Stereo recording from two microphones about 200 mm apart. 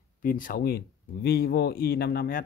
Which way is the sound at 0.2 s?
40° left (ahead or behind).